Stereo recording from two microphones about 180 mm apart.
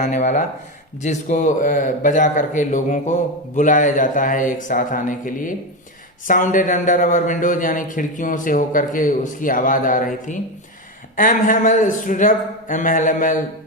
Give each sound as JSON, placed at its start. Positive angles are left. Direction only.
{"t": 0.0, "sound": "a man's voice", "side_deg": 40}